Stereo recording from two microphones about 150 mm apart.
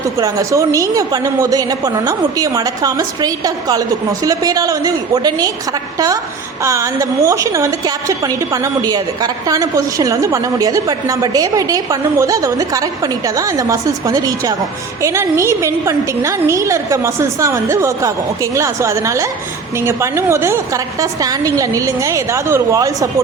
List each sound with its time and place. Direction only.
0.2 s a woman's voice: 20° right (ahead or behind)
6.6 s a woman's voice: 20° right (ahead or behind)